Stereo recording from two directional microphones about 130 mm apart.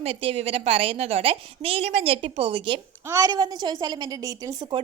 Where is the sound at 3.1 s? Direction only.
30° right (ahead or behind).